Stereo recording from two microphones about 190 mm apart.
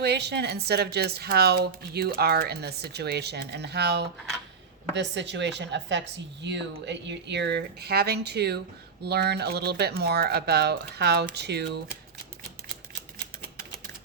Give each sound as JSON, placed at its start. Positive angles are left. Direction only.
{"t": 0.0, "sound": "speech", "side_deg": -60}